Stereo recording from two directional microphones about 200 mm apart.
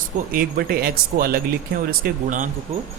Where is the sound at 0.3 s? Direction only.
50° right (ahead or behind).